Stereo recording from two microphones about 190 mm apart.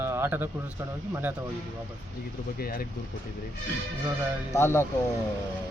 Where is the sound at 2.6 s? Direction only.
50° left (ahead or behind).